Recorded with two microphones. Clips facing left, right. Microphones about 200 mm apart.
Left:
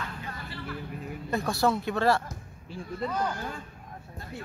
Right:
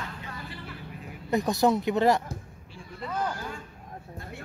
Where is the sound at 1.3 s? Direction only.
20° right (ahead or behind).